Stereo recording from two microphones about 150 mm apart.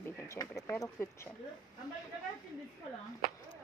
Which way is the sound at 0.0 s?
20° left (ahead or behind).